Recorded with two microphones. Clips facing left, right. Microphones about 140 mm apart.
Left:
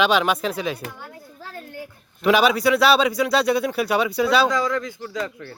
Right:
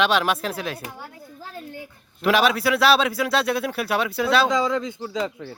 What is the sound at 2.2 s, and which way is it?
Speech, centre (ahead or behind).